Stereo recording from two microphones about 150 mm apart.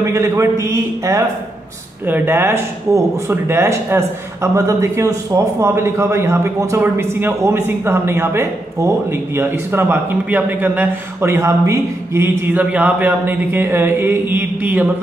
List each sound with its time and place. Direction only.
0.0 s a man's voice: 20° right (ahead or behind)